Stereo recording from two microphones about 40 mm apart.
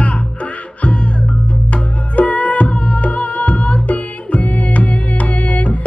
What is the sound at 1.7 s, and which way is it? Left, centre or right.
Music, left.